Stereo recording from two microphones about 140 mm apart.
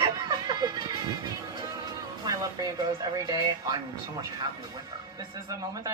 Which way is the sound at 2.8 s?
25° right (ahead or behind).